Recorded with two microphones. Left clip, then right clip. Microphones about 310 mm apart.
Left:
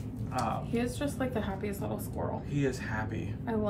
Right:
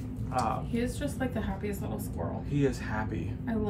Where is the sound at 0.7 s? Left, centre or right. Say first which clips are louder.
Even; centre.